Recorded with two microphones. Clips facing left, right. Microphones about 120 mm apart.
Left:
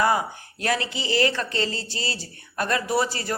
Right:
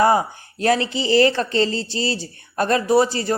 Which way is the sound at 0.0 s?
30° right (ahead or behind).